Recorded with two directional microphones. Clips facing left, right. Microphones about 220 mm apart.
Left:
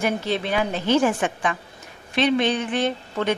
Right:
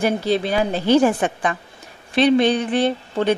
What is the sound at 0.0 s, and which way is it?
A woman's voice, 35° right (ahead or behind).